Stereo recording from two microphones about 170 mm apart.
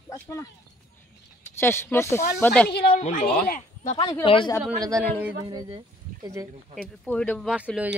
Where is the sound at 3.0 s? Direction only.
50° left (ahead or behind).